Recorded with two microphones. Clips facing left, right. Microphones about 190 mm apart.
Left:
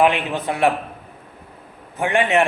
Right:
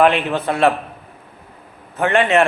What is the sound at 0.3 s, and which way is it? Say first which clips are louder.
Speech: right 3 dB; 15° left (ahead or behind).